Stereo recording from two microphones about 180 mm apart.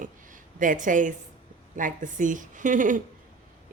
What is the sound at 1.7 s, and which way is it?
Speech, 45° right (ahead or behind).